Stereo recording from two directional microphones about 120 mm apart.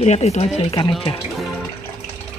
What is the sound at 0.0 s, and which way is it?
Speech, 70° left (ahead or behind).